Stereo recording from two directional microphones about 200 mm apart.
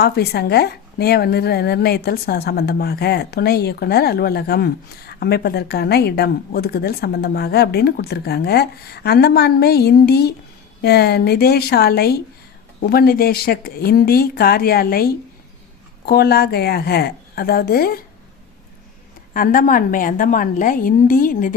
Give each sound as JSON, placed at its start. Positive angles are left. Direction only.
{"t": 0.0, "sound": "a woman's voice", "side_deg": 50}
{"t": 19.3, "sound": "a woman's voice", "side_deg": 45}